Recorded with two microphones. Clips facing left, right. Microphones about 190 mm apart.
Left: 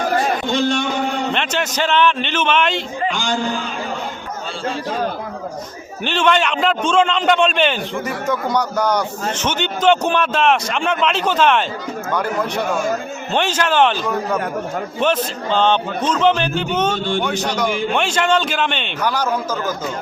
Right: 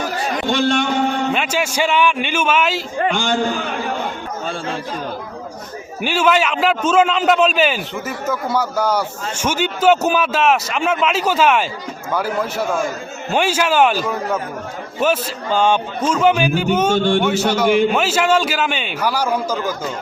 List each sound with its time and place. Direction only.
0.7 s a sound: 60° right (ahead or behind)
1.3 s a man's voice: 10° right (ahead or behind)
3.0 s a man's voice: 55° right (ahead or behind)
6.0 s a man's voice: 10° right (ahead or behind)